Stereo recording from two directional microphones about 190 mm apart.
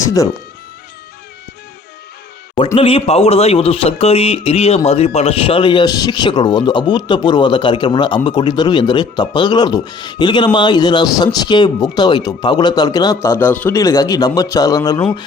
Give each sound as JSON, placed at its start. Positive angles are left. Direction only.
{"t": 0.0, "sound": "speech", "side_deg": 15}
{"t": 2.7, "sound": "a man's voice", "side_deg": 30}